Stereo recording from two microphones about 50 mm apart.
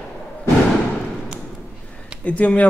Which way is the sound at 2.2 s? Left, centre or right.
Left.